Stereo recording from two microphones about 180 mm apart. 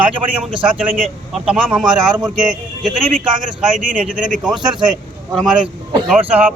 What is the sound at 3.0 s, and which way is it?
Speech, 50° right (ahead or behind).